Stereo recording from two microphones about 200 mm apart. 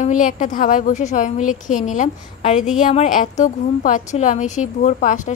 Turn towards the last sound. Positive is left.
turn(degrees=40)  # may be behind; listen again after turning